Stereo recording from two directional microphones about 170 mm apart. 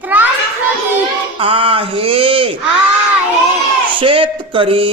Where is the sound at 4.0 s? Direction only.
30° right (ahead or behind).